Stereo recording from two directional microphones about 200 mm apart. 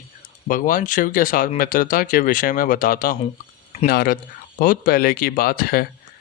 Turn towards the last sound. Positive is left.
turn(degrees=50)  # may be behind; listen again after turning